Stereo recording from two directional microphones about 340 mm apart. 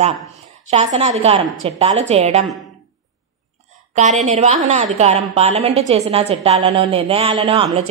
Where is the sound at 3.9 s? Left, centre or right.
Right.